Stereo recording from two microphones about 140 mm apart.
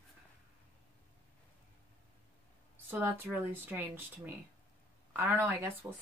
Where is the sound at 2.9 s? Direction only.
15° right (ahead or behind).